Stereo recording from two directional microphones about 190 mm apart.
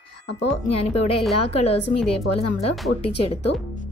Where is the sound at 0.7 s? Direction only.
35° left (ahead or behind).